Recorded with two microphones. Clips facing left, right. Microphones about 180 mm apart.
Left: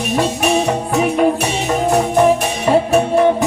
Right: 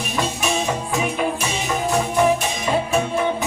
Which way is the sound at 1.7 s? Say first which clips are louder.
Left 6 dB; 55° left (ahead or behind).